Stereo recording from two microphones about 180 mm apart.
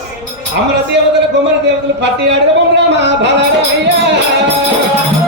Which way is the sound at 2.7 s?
75° right (ahead or behind).